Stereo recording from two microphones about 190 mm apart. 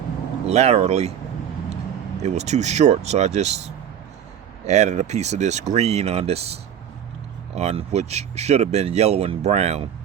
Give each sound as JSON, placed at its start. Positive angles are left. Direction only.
{"t": 0.4, "sound": "speech", "side_deg": -35}
{"t": 2.2, "sound": "speech", "side_deg": -35}